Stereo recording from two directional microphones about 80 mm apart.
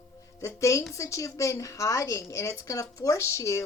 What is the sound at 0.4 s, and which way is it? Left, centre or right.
A woman's voice, left.